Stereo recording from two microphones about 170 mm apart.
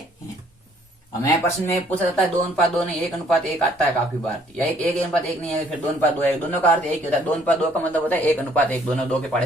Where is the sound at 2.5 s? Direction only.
Centre (ahead or behind).